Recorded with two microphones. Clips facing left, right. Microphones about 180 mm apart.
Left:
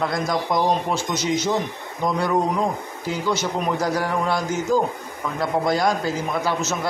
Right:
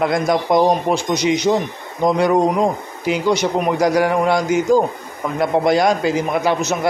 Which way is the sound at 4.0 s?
65° right (ahead or behind).